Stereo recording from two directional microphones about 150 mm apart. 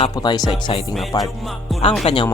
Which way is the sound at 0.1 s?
25° left (ahead or behind).